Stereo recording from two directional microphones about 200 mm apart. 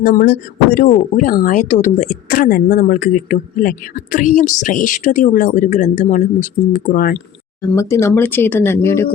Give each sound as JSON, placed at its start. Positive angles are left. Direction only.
{"t": 0.0, "sound": "speech", "side_deg": 50}
{"t": 7.6, "sound": "speech", "side_deg": 15}